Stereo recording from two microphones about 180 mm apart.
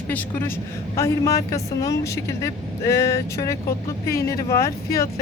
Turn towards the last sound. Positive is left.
turn(degrees=15)  # may be behind; listen again after turning